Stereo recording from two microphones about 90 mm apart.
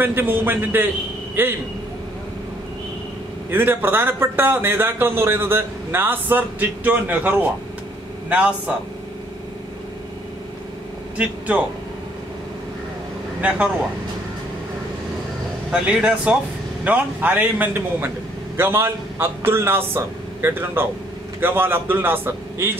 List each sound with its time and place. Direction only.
0.0 s a man's voice: 25° right (ahead or behind)
3.4 s a man's voice: 25° right (ahead or behind)
11.1 s a man's voice: 15° right (ahead or behind)
15.7 s a man's voice: 15° right (ahead or behind)